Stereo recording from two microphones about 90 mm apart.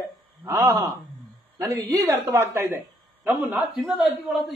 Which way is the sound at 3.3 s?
15° right (ahead or behind).